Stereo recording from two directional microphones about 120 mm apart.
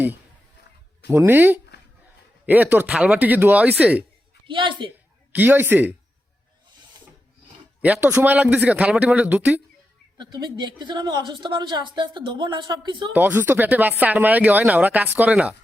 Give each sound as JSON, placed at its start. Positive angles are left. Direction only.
{"t": 1.1, "sound": "speech", "side_deg": -15}
{"t": 4.4, "sound": "a woman's voice", "side_deg": -45}
{"t": 5.3, "sound": "speech", "side_deg": -15}
{"t": 7.8, "sound": "a man's voice", "side_deg": -5}
{"t": 10.2, "sound": "a woman's voice", "side_deg": -40}
{"t": 13.1, "sound": "speech", "side_deg": -15}